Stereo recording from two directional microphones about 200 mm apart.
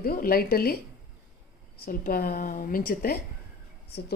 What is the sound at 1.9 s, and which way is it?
A woman's voice, 45° left (ahead or behind).